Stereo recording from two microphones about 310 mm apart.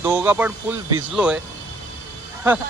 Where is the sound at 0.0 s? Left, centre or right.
Centre.